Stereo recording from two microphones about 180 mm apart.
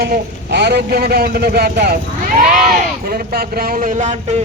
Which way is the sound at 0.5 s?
65° right (ahead or behind).